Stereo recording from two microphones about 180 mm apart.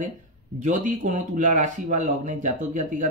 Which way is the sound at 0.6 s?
45° right (ahead or behind).